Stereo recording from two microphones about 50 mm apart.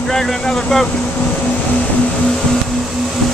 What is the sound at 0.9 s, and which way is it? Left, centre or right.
Speech, left.